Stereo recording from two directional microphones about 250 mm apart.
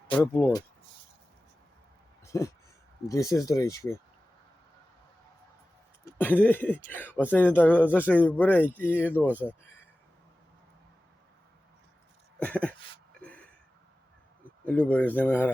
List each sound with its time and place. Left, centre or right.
0.3 s speech: centre
2.2 s a sound: centre
3.1 s speech: centre
6.1 s speech: centre
12.4 s a sound: centre
14.6 s speech: centre